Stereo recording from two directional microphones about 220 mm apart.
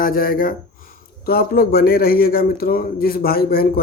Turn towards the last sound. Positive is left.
turn(degrees=45)  # may be behind; listen again after turning